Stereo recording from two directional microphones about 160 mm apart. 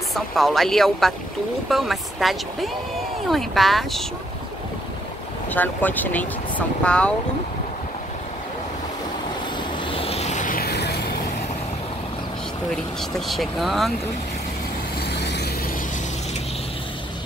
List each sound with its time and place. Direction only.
0.1 s speech: centre (ahead or behind)
5.5 s speech: 10° left (ahead or behind)
9.8 s vehicle: 35° left (ahead or behind); by 11.1 s 90° left
13.3 s speech: centre (ahead or behind)
15.0 s vehicle: 90° left